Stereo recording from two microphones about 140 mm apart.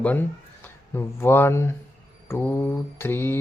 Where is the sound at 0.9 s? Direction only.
15° left (ahead or behind).